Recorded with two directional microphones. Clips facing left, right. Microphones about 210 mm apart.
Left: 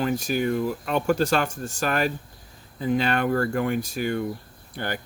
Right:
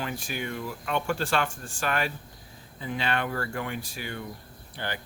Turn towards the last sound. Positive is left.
turn(degrees=45)  # may be behind; listen again after turning